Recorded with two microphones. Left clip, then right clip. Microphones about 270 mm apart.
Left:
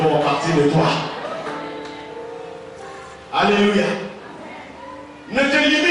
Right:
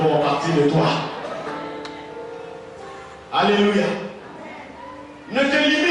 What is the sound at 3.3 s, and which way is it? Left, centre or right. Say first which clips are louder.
Speech: left 1 dB; centre.